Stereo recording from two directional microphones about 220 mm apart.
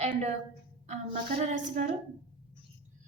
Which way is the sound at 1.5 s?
35° right (ahead or behind).